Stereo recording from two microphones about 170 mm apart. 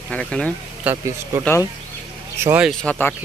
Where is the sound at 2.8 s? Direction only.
10° left (ahead or behind).